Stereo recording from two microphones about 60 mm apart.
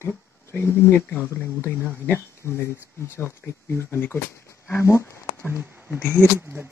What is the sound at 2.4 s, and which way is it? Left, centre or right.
Speech, left.